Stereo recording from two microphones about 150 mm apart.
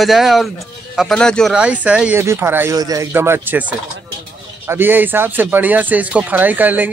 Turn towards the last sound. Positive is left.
turn(degrees=-10)  # may be behind; listen again after turning